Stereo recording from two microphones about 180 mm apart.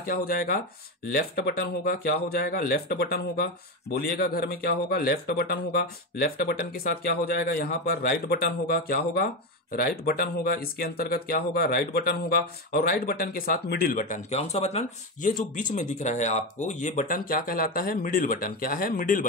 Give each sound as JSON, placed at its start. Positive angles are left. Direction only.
{"t": 0.1, "sound": "speech", "side_deg": 55}